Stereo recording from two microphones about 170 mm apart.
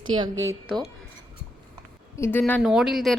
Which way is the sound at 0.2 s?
20° right (ahead or behind).